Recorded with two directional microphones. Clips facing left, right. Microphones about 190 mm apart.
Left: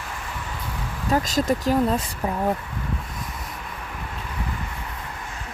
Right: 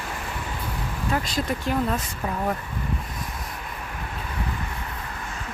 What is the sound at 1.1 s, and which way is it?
Speech, 40° left (ahead or behind).